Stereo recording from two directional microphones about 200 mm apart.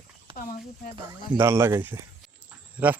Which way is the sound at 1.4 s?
10° right (ahead or behind).